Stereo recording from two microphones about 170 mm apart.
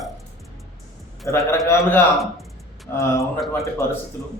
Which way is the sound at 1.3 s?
15° left (ahead or behind).